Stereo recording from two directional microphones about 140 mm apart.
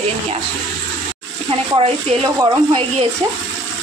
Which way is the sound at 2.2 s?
35° right (ahead or behind).